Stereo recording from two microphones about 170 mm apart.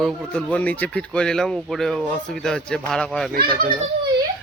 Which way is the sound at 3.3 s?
65° right (ahead or behind).